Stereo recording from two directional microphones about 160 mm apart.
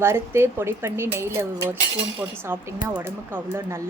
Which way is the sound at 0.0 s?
15° right (ahead or behind).